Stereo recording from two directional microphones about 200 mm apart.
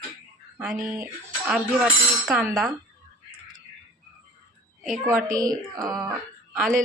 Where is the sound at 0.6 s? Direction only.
5° right (ahead or behind).